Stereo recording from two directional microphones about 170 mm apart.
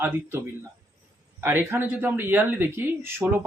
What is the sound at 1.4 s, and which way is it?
Speech, 10° right (ahead or behind).